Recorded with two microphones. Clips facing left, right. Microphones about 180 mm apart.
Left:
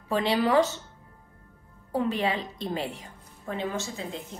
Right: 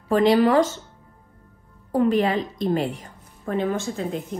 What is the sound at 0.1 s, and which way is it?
Speech, 45° right (ahead or behind).